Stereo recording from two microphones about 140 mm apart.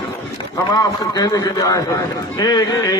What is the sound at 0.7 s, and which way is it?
A man's voice, 25° left (ahead or behind).